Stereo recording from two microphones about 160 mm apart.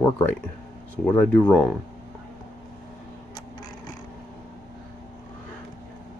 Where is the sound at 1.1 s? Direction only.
10° left (ahead or behind).